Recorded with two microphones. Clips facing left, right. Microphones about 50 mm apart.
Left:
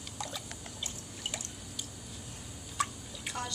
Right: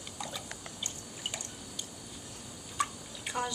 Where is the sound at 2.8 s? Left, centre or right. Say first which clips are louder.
Right 1 dB; centre.